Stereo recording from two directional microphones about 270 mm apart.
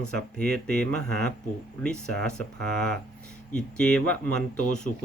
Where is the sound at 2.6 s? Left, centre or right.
Right.